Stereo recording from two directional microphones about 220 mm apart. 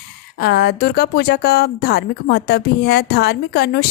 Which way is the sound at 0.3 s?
50° left (ahead or behind).